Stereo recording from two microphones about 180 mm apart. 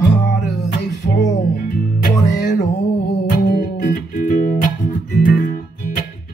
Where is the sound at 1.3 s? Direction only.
45° left (ahead or behind).